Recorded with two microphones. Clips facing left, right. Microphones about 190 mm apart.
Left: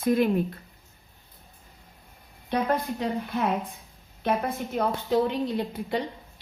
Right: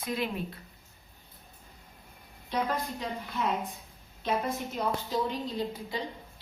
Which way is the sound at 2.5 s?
60° left (ahead or behind).